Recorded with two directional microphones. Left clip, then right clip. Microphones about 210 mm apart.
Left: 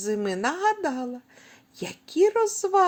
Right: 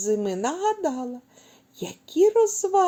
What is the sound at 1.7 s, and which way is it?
Speech, 45° left (ahead or behind).